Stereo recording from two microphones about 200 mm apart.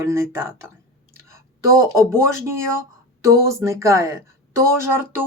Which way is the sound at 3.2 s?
15° right (ahead or behind).